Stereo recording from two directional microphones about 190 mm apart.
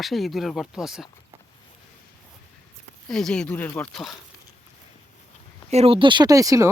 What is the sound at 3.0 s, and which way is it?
Speech, centre (ahead or behind).